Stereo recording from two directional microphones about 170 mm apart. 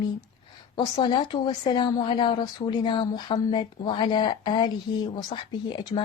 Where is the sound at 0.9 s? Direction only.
25° left (ahead or behind).